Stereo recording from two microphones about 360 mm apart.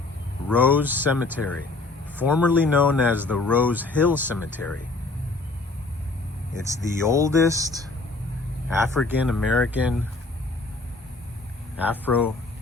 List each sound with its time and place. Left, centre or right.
0.4 s speech: centre
7.0 s speech: centre
11.8 s speech: centre